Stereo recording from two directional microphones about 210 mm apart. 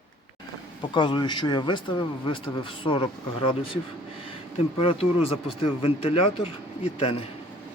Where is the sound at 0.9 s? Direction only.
20° left (ahead or behind).